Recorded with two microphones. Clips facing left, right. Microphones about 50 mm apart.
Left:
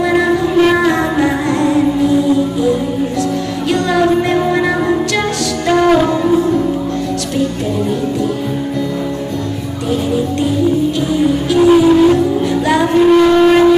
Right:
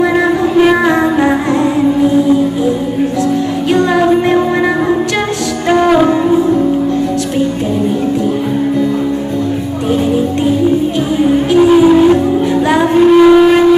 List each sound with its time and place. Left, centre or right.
0.1 s music: centre
3.7 s music: centre
11.6 s music: centre
12.6 s a sound: centre